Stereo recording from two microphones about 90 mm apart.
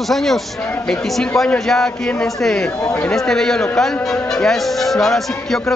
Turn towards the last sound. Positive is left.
turn(degrees=5)  # may be behind; listen again after turning